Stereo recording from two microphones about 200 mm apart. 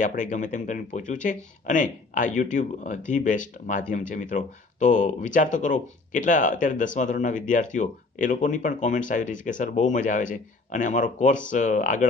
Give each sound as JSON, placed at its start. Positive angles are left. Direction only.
{"t": 0.0, "sound": "speech", "side_deg": 40}